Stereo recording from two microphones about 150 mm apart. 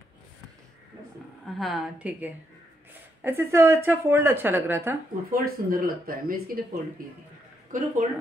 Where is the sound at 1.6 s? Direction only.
Centre (ahead or behind).